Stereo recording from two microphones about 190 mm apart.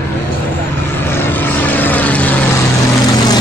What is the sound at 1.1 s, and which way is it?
Vehicle, 10° left (ahead or behind).